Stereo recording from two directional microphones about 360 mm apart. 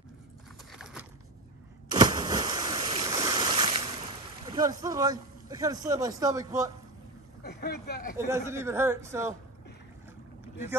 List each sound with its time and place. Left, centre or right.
0.7 s a sound: centre
1.9 s boat: centre
4.5 s a man's voice: centre
7.4 s speech: left
8.3 s a man's voice: centre